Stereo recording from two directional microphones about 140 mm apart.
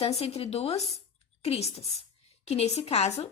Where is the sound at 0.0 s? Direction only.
45° left (ahead or behind).